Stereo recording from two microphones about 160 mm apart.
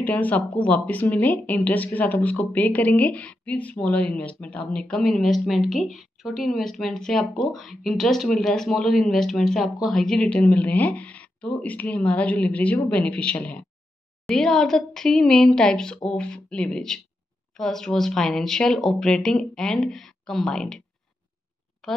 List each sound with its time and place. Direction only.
0.0 s speech: 10° left (ahead or behind)
21.8 s a woman's voice: centre (ahead or behind)